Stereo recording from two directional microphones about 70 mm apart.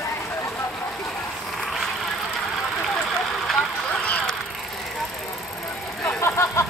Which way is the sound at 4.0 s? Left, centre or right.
Centre.